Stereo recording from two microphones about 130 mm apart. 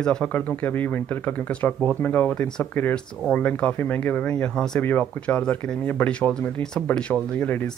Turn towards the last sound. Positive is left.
turn(degrees=15)  # may be behind; listen again after turning